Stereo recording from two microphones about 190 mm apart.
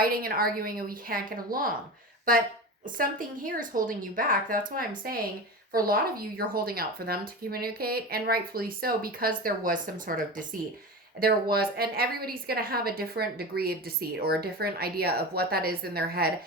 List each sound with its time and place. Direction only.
0.0 s a woman's voice: 50° right (ahead or behind)
2.8 s a woman's voice: 45° right (ahead or behind)